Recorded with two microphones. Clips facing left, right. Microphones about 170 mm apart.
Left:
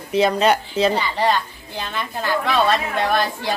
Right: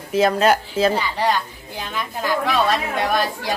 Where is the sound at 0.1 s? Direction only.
Centre (ahead or behind).